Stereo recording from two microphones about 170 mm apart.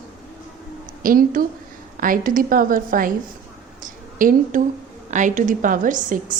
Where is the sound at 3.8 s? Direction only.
55° right (ahead or behind).